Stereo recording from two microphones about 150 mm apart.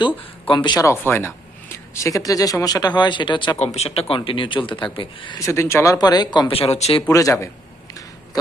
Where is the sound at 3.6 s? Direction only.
45° left (ahead or behind).